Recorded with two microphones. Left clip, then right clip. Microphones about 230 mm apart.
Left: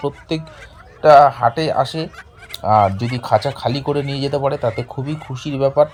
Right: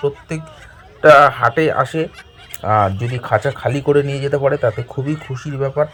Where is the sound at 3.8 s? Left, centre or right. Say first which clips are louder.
Right 5 dB; right.